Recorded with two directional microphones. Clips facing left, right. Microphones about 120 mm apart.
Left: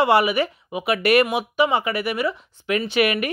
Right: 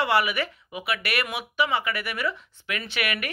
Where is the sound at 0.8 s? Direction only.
40° left (ahead or behind).